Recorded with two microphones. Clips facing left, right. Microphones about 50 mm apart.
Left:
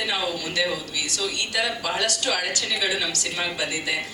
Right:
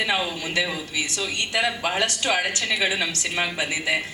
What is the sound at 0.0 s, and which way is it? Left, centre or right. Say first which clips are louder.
A man's voice: right 2 dB; right.